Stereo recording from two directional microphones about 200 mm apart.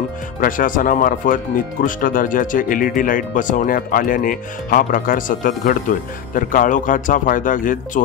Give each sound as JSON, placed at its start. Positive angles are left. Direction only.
{"t": 0.4, "sound": "speech", "side_deg": 40}